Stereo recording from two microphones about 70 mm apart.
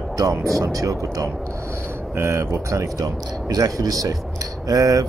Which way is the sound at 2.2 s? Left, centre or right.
Right.